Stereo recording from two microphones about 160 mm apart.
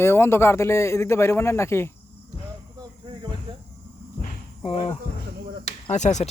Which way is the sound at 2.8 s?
30° right (ahead or behind).